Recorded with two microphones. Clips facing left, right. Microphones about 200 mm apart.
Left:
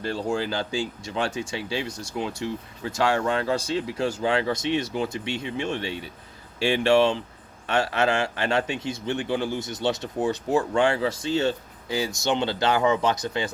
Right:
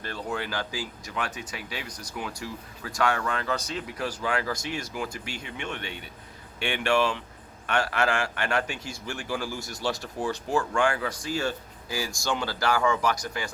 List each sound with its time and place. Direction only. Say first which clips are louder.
0.0 s speech: left 6 dB; 30° left (ahead or behind)